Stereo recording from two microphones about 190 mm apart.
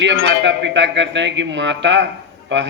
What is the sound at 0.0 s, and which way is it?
A man's voice, 70° right (ahead or behind).